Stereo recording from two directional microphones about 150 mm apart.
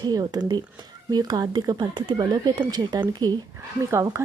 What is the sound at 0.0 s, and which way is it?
Speech, 25° right (ahead or behind).